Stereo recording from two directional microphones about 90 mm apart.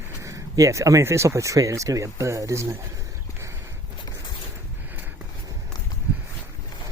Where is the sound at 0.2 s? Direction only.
35° right (ahead or behind).